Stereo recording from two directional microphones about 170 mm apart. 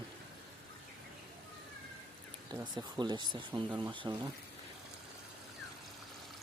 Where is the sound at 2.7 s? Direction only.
25° right (ahead or behind).